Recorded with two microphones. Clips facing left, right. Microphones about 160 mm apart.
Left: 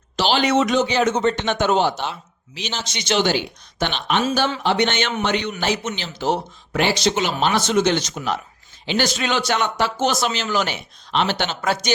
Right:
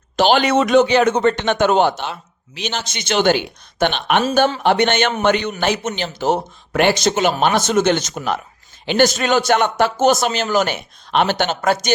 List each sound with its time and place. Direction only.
0.2 s speech: 55° right (ahead or behind)
4.2 s speech: 40° right (ahead or behind)
4.6 s a man's voice: 55° right (ahead or behind)